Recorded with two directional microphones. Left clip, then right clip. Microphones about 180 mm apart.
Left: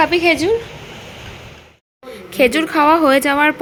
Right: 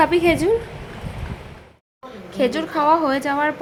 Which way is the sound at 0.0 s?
5° right (ahead or behind).